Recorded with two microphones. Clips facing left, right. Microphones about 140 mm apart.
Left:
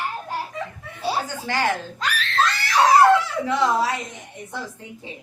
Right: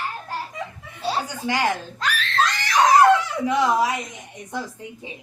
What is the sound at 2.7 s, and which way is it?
Dog, 5° left (ahead or behind).